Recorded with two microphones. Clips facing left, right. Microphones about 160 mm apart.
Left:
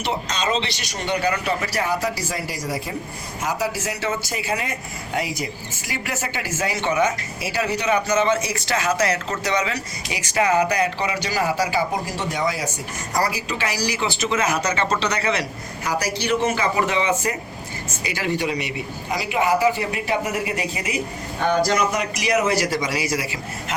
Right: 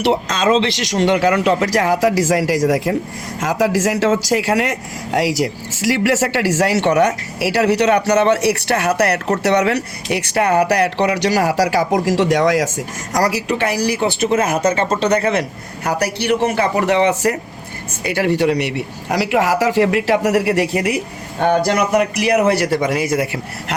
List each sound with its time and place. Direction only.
0.0 s a man's voice: 80° right; by 23.7 s 55° right (ahead or behind)